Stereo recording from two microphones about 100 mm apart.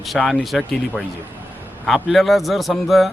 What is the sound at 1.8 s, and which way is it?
Speech, centre (ahead or behind).